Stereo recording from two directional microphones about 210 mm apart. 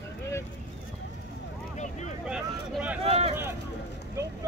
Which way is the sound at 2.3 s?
5° right (ahead or behind).